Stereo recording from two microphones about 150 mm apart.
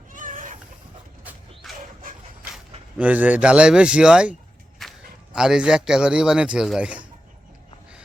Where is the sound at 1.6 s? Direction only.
Centre (ahead or behind).